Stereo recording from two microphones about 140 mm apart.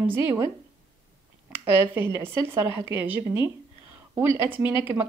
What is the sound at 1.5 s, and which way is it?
Speech, 15° right (ahead or behind).